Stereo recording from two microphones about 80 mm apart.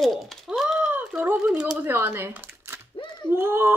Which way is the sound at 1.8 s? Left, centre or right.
Right.